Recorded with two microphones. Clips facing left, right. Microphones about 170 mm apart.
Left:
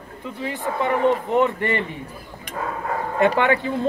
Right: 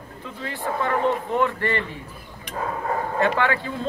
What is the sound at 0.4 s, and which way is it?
A man's voice, 15° left (ahead or behind).